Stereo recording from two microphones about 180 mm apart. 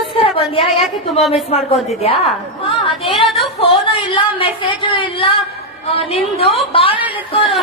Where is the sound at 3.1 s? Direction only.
Centre (ahead or behind).